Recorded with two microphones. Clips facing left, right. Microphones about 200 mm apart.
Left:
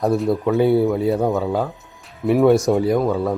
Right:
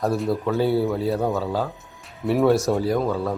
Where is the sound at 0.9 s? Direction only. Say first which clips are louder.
Left 4 dB; 20° left (ahead or behind).